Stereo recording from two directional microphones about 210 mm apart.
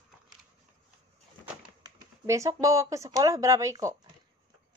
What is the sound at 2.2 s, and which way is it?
Speech, 15° right (ahead or behind).